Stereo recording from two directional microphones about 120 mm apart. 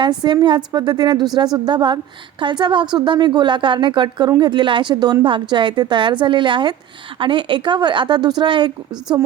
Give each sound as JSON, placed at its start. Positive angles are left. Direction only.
{"t": 0.0, "sound": "a woman's voice", "side_deg": -40}